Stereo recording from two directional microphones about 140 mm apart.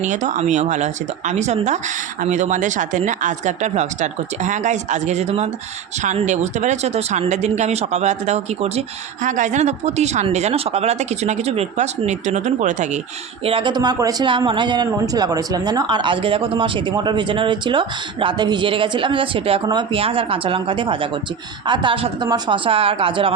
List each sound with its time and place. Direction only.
0.0 s speech: 60° right (ahead or behind)
9.2 s speech: 65° right (ahead or behind)
13.4 s speech: 40° right (ahead or behind)